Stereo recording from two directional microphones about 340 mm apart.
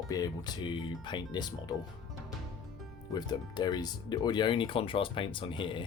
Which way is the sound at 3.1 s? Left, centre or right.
Centre.